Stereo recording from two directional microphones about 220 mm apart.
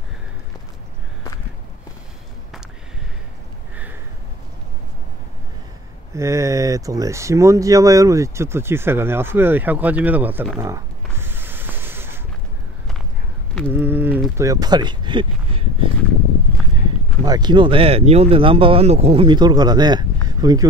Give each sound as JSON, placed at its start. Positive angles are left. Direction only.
{"t": 6.1, "sound": "speech", "side_deg": -15}
{"t": 13.7, "sound": "a sound", "side_deg": -10}
{"t": 17.2, "sound": "speech", "side_deg": -20}